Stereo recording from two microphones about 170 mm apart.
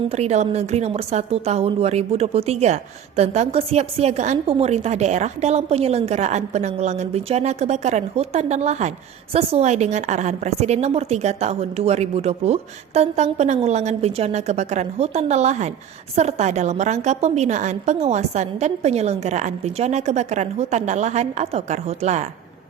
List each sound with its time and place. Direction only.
0.1 s a woman's voice: 40° right (ahead or behind)